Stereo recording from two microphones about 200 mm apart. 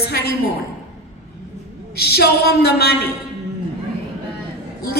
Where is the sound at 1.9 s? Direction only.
50° left (ahead or behind).